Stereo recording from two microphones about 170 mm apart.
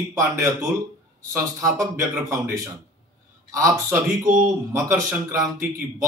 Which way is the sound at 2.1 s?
20° right (ahead or behind).